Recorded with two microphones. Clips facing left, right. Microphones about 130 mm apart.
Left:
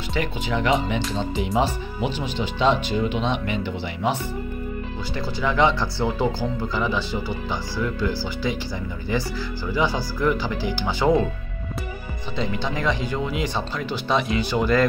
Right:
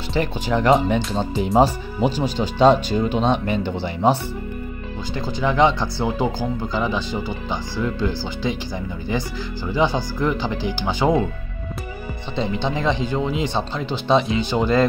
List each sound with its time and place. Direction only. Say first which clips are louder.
0.1 s speech: right 4 dB; 35° right (ahead or behind)
5.4 s speech: right 3 dB; 20° right (ahead or behind)
12.4 s speech: right 3 dB; 25° right (ahead or behind)